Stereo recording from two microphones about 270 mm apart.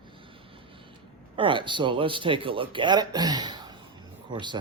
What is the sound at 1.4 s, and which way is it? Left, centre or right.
Speech, centre.